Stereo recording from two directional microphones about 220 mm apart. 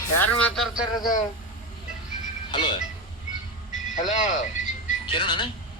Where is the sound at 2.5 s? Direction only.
20° left (ahead or behind).